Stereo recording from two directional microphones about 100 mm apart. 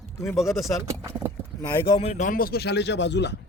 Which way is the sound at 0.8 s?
30° right (ahead or behind).